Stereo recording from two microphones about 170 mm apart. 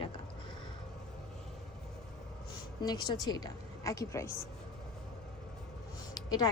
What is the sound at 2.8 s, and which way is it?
A woman's voice, 25° left (ahead or behind).